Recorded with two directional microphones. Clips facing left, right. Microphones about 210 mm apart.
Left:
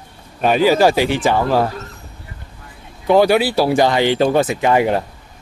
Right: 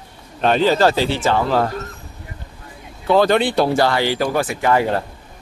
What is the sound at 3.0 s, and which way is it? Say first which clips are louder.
Speech: left 2 dB; 15° left (ahead or behind).